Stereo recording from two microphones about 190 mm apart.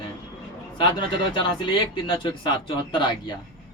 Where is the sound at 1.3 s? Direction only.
25° left (ahead or behind).